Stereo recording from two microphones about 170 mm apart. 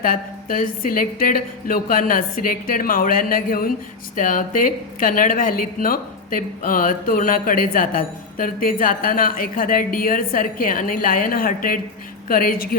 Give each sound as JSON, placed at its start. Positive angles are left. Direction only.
{"t": 0.0, "sound": "speech", "side_deg": 55}